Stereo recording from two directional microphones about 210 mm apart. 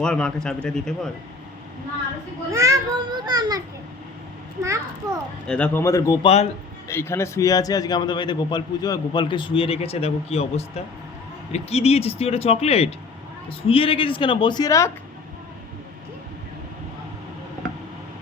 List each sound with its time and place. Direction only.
0.0 s speech: 5° left (ahead or behind)
2.5 s a child's voice: 15° right (ahead or behind)
5.5 s a man's voice: 5° left (ahead or behind)
6.2 s a man's voice: 30° left (ahead or behind)
6.8 s a man's voice: 10° left (ahead or behind)